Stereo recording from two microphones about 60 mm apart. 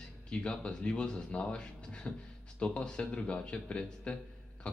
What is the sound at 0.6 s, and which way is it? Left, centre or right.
A man's voice, centre.